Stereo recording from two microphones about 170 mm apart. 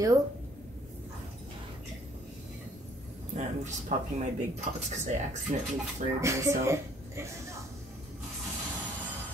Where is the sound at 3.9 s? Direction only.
45° right (ahead or behind).